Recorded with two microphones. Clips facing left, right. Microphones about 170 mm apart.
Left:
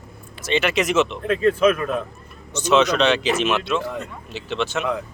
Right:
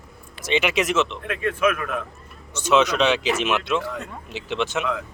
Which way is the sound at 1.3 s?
30° left (ahead or behind).